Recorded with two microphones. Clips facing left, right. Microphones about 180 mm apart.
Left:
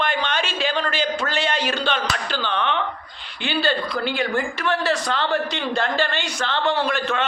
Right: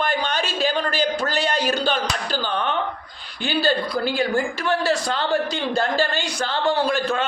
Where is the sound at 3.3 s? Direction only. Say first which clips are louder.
Right 1 dB; 40° right (ahead or behind).